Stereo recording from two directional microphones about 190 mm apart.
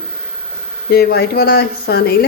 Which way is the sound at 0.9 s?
55° left (ahead or behind).